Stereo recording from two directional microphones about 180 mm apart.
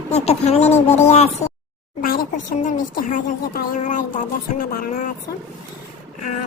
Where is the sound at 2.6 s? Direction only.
50° left (ahead or behind).